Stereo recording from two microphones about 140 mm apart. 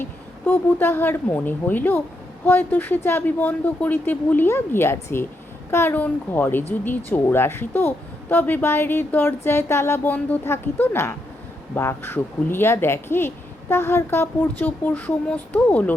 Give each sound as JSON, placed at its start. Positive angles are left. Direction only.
{"t": 0.0, "sound": "a woman's voice", "side_deg": 15}